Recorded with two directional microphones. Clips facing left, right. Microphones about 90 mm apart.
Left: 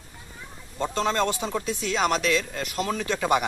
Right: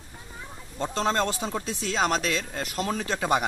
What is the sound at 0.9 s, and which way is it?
Speech, 35° right (ahead or behind).